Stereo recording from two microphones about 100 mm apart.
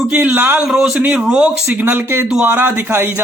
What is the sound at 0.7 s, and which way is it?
Speech, 5° right (ahead or behind).